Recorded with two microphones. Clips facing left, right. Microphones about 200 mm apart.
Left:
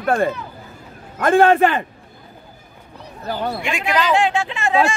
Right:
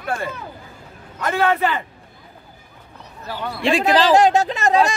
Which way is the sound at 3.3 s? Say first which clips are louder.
Left 5 dB; 35° left (ahead or behind).